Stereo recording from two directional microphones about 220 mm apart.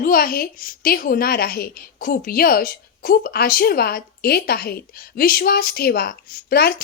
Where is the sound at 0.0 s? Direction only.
40° left (ahead or behind).